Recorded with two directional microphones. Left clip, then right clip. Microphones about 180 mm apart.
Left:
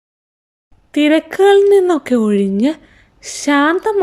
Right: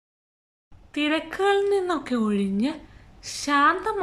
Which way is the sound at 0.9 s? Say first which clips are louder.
Left 12 dB; 40° left (ahead or behind).